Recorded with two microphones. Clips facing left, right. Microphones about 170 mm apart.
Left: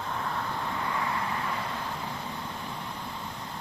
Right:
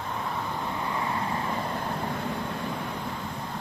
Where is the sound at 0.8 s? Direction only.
25° right (ahead or behind).